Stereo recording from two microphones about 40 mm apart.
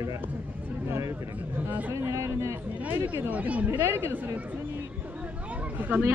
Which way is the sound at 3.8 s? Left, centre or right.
Right.